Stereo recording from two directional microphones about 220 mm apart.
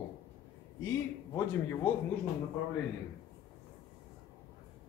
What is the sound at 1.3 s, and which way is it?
Speech, 10° left (ahead or behind).